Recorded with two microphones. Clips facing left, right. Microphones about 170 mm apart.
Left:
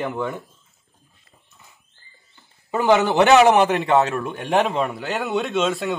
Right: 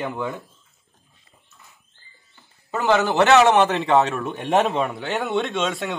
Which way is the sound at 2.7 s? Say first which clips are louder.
Left 2 dB; 15° left (ahead or behind).